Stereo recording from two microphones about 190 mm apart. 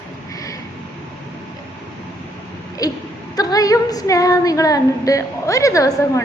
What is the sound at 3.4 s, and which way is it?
A woman's voice, 20° left (ahead or behind).